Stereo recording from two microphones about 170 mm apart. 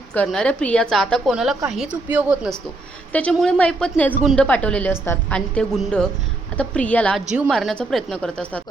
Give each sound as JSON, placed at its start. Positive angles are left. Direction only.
{"t": 0.1, "sound": "a woman's voice", "side_deg": 5}
{"t": 3.1, "sound": "a woman's voice", "side_deg": 5}
{"t": 7.3, "sound": "a woman's voice", "side_deg": -5}